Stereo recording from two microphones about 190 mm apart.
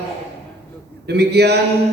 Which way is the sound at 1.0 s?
60° right (ahead or behind).